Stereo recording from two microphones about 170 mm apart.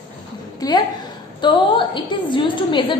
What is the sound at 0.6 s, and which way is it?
A woman's voice, 20° left (ahead or behind).